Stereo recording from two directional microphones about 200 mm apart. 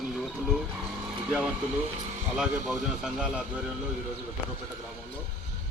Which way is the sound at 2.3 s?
5° right (ahead or behind).